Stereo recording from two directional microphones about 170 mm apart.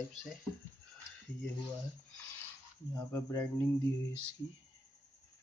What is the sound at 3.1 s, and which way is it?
Speech, 15° left (ahead or behind).